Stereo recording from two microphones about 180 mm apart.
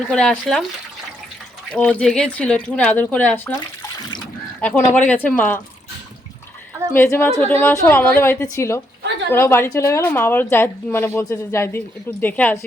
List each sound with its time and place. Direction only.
0.1 s speech: 5° left (ahead or behind)
1.7 s speech: 5° left (ahead or behind)
4.8 s speech: 15° left (ahead or behind)
6.9 s speech: 10° left (ahead or behind)